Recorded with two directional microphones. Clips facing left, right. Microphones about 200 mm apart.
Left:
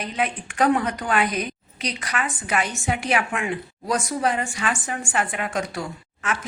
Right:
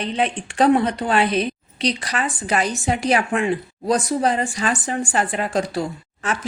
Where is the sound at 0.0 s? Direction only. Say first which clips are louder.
Right 4 dB; 30° right (ahead or behind).